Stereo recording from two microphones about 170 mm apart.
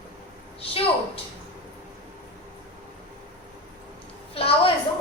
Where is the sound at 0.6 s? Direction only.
35° left (ahead or behind).